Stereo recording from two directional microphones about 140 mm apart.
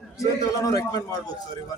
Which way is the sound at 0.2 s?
25° left (ahead or behind).